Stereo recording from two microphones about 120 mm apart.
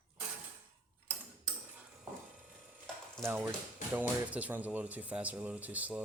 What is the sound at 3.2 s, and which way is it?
Speech, 20° right (ahead or behind).